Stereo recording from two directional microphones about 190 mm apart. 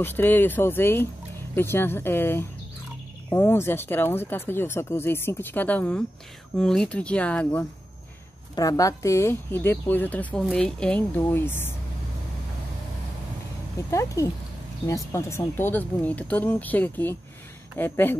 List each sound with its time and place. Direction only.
0.0 s speech: 10° left (ahead or behind)
8.5 s speech: 20° left (ahead or behind)
13.8 s speech: 15° left (ahead or behind)